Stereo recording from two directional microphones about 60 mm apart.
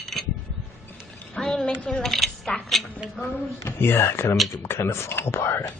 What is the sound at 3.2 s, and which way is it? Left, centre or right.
Speech, left.